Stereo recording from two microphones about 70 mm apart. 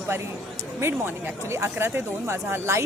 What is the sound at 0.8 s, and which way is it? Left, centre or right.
Speech, right.